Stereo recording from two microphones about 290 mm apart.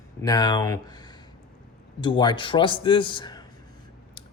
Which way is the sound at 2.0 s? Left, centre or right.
Centre.